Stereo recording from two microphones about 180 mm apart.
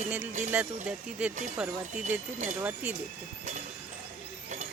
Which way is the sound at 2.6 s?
5° right (ahead or behind).